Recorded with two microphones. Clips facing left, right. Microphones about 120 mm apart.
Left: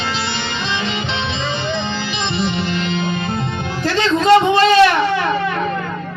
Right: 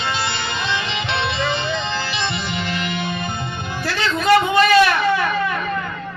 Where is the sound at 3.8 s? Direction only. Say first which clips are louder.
Left 5 dB; 25° left (ahead or behind).